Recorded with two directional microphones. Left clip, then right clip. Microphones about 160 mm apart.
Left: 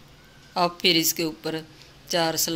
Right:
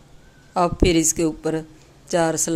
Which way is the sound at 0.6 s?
55° right (ahead or behind).